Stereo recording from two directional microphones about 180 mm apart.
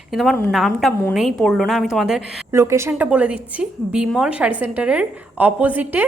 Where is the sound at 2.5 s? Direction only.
15° right (ahead or behind).